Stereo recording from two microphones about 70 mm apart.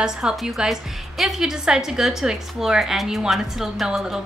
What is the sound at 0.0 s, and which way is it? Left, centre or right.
A woman's voice, centre.